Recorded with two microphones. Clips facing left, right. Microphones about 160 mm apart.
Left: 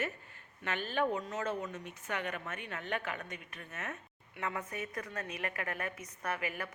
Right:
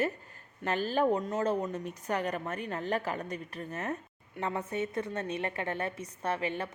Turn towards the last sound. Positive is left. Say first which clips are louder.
# right 5 dB
turn(degrees=-25)  # may be behind; listen again after turning